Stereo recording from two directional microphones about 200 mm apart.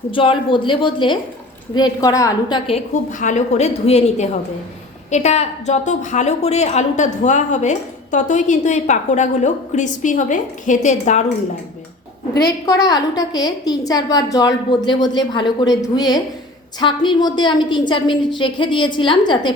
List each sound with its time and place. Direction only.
0.1 s a woman's voice: 25° left (ahead or behind)
2.6 s a woman's voice: 35° left (ahead or behind)
12.4 s a woman's voice: 15° left (ahead or behind)